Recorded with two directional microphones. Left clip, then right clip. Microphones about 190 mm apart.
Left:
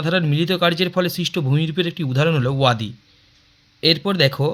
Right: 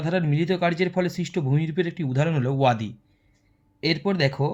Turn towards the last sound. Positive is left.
turn(degrees=20)  # may be behind; listen again after turning